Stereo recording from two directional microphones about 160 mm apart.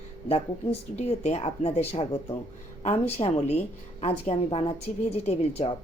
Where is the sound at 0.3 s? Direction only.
40° left (ahead or behind).